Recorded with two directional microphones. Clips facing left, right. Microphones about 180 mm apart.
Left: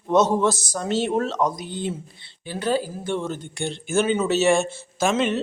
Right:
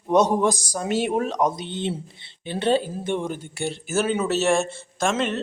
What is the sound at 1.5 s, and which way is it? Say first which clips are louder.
A man's voice: right 1 dB; 25° right (ahead or behind).